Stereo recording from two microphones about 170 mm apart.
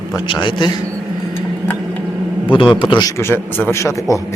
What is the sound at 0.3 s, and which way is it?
Speech, 30° left (ahead or behind).